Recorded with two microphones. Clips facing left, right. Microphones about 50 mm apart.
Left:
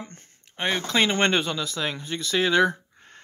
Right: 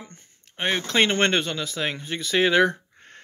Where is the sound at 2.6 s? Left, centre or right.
Centre.